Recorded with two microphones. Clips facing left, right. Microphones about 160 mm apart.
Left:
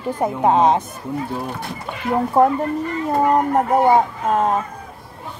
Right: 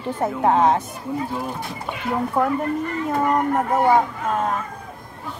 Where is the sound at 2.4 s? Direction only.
35° left (ahead or behind).